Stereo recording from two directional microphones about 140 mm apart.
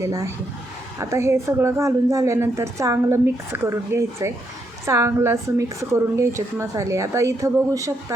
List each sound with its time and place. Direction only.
0.0 s a woman's voice: 20° right (ahead or behind)